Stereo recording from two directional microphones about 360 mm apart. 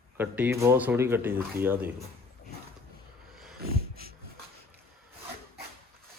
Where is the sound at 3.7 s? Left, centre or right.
Left.